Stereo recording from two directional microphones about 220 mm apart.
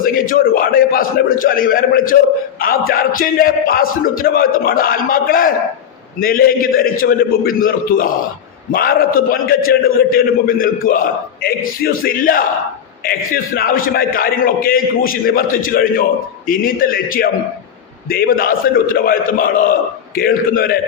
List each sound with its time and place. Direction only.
0.0 s a man's voice: 40° left (ahead or behind)